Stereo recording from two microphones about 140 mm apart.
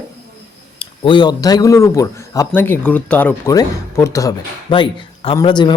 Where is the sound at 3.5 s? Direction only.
25° left (ahead or behind).